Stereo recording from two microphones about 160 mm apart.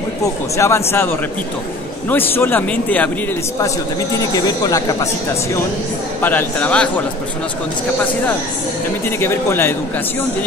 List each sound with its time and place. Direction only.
0.6 s speech: 15° left (ahead or behind)
4.2 s speech: 20° left (ahead or behind)
6.2 s speech: 10° left (ahead or behind)
9.2 s speech: 15° left (ahead or behind)